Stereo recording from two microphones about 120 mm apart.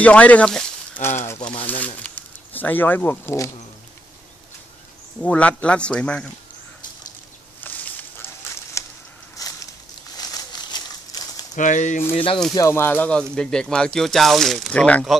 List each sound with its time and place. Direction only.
0.0 s speech: 10° left (ahead or behind)
1.0 s speech: 20° left (ahead or behind)
5.2 s speech: 10° left (ahead or behind)
7.6 s a sound: 15° left (ahead or behind)
8.8 s a sound: 25° left (ahead or behind)
10.1 s crumpling: 35° left (ahead or behind)
11.5 s speech: 90° left
12.5 s speech: 25° left (ahead or behind)